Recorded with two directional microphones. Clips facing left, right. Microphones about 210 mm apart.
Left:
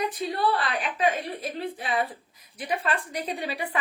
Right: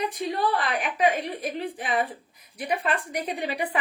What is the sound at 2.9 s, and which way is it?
Speech, 15° right (ahead or behind).